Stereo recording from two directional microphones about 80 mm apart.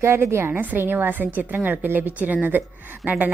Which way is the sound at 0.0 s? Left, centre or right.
Right.